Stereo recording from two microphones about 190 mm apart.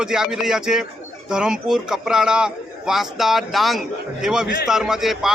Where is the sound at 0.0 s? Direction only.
5° right (ahead or behind).